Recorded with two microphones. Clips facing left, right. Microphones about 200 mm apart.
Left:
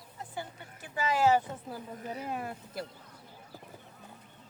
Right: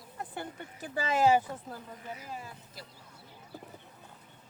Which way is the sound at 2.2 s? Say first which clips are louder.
Left 7 dB; 60° left (ahead or behind).